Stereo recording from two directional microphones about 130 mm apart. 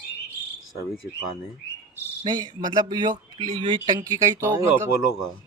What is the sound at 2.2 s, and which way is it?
Speech, 35° right (ahead or behind).